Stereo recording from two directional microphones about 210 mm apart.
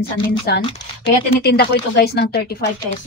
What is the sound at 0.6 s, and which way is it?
Speech, 25° left (ahead or behind).